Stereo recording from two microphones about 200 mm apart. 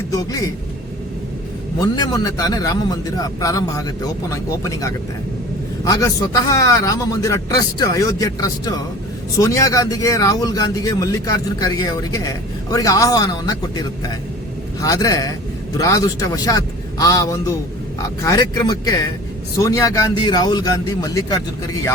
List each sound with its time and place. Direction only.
0.1 s a man's voice: 15° left (ahead or behind)
1.8 s speech: 15° left (ahead or behind)